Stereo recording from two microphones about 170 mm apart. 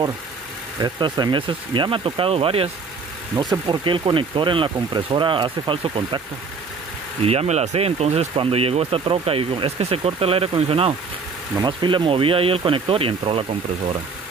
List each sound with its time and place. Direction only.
0.7 s speech: 25° right (ahead or behind)
7.2 s speech: 40° right (ahead or behind)